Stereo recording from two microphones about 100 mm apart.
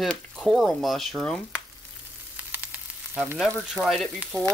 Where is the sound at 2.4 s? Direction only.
15° right (ahead or behind).